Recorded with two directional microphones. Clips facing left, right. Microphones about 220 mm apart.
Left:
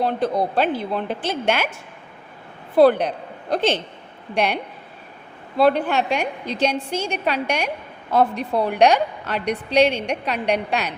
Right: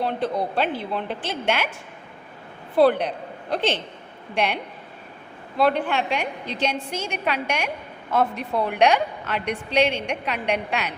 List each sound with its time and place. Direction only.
0.0 s a woman's voice: 40° left (ahead or behind)
2.7 s a woman's voice: 45° left (ahead or behind)
5.5 s a woman's voice: 35° left (ahead or behind)